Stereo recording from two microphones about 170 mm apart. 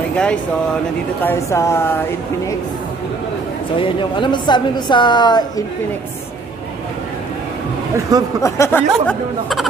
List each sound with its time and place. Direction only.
0.1 s speech: 5° left (ahead or behind)
3.7 s a woman's voice: 30° left (ahead or behind)
8.4 s speech: 15° left (ahead or behind)